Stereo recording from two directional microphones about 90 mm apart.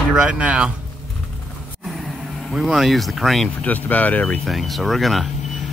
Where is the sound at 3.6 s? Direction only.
20° left (ahead or behind).